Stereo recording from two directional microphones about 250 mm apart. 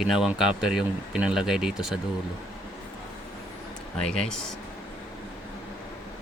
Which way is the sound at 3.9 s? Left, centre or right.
Centre.